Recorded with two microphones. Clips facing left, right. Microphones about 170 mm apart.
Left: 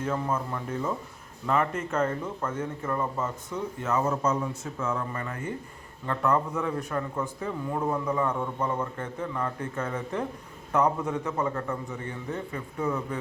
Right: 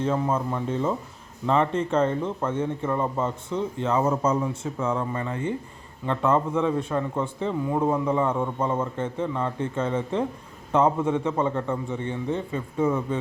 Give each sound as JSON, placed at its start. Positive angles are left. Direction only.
{"t": 0.0, "sound": "a man's voice", "side_deg": -25}